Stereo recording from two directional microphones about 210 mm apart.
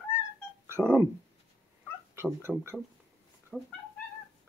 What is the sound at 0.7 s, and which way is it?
Speech, 10° right (ahead or behind).